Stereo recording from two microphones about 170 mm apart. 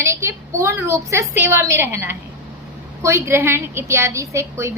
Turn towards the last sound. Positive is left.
turn(degrees=-15)  # may be behind; listen again after turning